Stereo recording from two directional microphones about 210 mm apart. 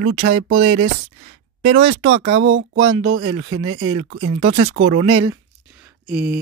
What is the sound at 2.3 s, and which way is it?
Speech, 65° right (ahead or behind).